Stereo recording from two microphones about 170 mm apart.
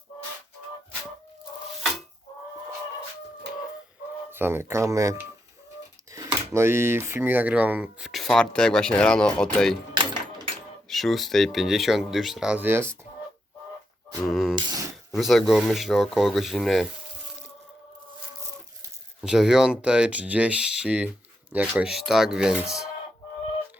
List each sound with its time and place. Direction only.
4.3 s speech: 15° right (ahead or behind); by 9.7 s 5° left (ahead or behind)
10.8 s speech: centre (ahead or behind)
14.3 s speech: centre (ahead or behind)
14.5 s grunt: 25° right (ahead or behind)
15.1 s speech: centre (ahead or behind)
19.2 s speech: 5° right (ahead or behind)